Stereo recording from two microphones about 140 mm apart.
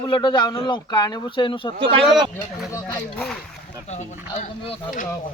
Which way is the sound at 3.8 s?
55° left (ahead or behind).